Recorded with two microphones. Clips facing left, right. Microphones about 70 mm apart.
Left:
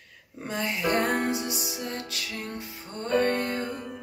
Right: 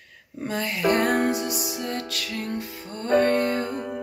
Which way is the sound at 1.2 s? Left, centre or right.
Right.